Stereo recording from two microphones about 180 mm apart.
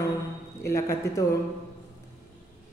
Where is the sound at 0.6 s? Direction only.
15° left (ahead or behind).